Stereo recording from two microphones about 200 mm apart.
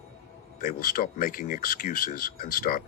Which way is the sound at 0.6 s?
45° left (ahead or behind).